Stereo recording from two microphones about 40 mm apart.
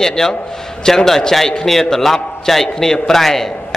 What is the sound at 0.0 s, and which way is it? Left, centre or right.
A man's voice, centre.